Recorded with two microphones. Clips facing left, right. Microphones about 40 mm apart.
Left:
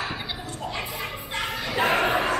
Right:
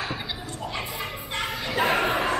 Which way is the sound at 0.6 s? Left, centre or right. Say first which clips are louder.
Left 1 dB; centre.